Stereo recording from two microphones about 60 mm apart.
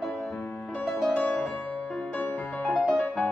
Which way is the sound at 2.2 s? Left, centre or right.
Left.